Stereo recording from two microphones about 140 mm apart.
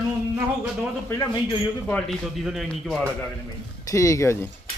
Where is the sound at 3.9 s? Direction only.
20° left (ahead or behind).